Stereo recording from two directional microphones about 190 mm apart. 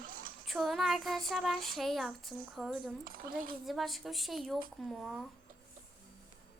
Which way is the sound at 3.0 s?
50° right (ahead or behind).